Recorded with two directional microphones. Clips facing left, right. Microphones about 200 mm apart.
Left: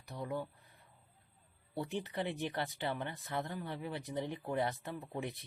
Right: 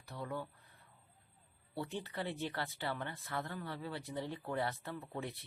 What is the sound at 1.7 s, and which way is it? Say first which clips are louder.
Speech: left 3 dB; 15° left (ahead or behind).